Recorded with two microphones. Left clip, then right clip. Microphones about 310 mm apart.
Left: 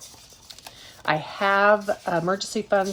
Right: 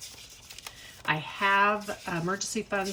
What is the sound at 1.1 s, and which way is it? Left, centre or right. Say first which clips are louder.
Speech: left 4 dB; centre.